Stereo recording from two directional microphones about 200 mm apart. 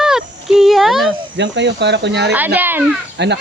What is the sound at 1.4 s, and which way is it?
Speech, 60° right (ahead or behind).